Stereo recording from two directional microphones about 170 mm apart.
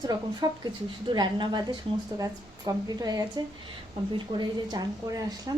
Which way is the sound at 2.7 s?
20° right (ahead or behind).